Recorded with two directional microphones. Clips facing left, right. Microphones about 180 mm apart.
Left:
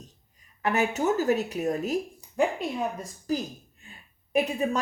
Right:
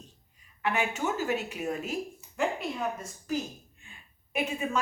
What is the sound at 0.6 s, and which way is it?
Speech, 40° left (ahead or behind).